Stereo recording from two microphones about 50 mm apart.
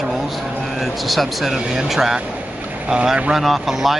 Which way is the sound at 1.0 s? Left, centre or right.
Centre.